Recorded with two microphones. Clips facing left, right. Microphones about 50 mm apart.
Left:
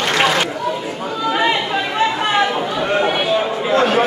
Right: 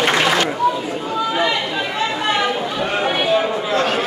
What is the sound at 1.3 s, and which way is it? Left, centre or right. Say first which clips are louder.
Chatter: left 5 dB; left.